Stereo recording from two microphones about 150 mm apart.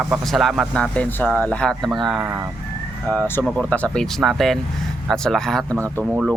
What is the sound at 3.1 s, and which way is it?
Speech, 10° left (ahead or behind).